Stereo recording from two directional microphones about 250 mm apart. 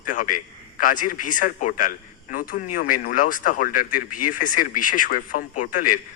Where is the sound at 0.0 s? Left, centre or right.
Left.